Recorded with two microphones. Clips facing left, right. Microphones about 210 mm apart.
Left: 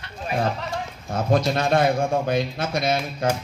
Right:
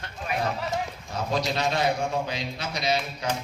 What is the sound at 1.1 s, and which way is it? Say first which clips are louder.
A man's voice: left 6 dB; 50° left (ahead or behind).